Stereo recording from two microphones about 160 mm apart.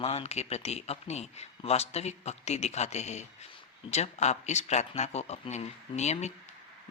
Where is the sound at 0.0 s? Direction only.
40° left (ahead or behind).